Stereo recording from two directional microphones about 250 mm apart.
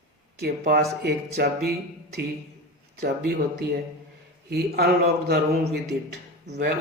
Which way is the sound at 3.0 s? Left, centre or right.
Right.